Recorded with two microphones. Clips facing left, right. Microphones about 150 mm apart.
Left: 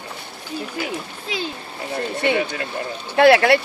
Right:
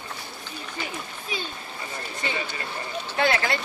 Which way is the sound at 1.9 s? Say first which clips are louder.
Left 12 dB; 65° left (ahead or behind).